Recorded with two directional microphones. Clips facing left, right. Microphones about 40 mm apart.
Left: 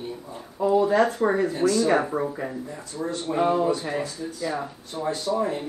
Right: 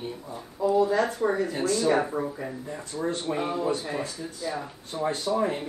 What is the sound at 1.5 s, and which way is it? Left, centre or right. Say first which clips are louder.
Speech: left 4 dB; right.